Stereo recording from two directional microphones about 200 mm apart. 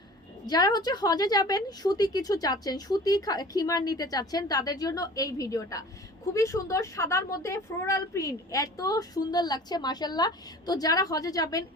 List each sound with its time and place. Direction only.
0.4 s a woman's voice: 20° left (ahead or behind)